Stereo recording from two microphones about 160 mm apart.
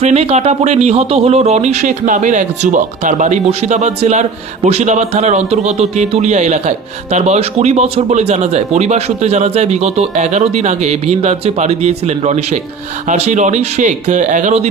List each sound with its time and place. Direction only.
0.0 s speech: 40° right (ahead or behind)